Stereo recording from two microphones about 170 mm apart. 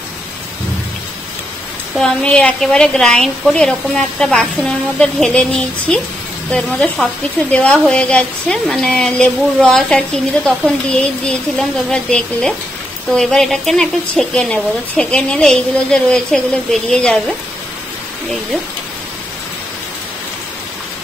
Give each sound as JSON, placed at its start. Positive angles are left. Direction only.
{"t": 2.0, "sound": "a woman's voice", "side_deg": 5}